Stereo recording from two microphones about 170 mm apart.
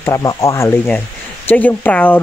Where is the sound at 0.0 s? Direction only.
20° left (ahead or behind).